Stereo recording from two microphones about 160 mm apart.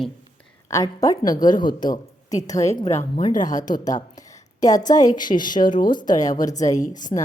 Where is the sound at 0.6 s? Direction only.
20° left (ahead or behind).